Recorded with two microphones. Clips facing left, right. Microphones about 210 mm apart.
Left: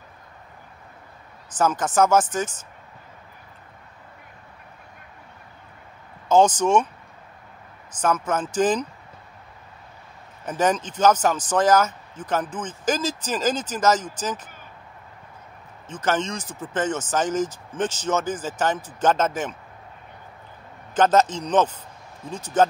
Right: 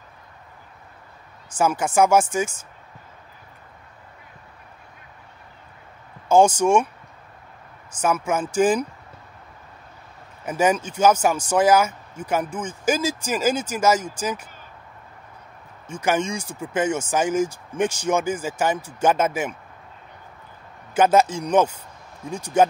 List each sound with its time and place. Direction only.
1.6 s speech: 10° right (ahead or behind)
6.2 s speech: 10° right (ahead or behind)
8.0 s speech: 10° right (ahead or behind)
10.4 s speech: 10° right (ahead or behind)
15.9 s speech: 10° right (ahead or behind)
20.9 s speech: 10° right (ahead or behind)